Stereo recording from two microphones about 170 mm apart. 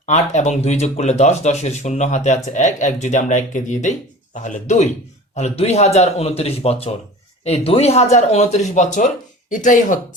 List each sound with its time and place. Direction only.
0.0 s speech: 45° left (ahead or behind)